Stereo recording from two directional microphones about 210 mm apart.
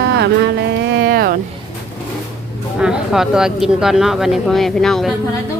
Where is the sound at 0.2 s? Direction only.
55° right (ahead or behind).